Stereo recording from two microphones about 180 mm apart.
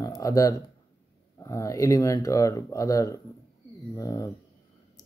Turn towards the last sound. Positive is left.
turn(degrees=20)  # may be behind; listen again after turning